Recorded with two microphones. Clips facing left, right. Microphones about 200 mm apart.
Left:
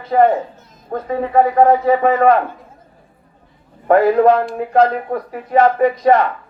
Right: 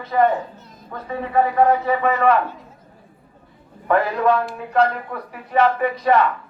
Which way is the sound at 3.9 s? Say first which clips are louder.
Left 7 dB; 45° left (ahead or behind).